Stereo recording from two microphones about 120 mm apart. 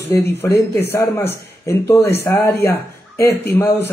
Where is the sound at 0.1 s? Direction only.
20° left (ahead or behind).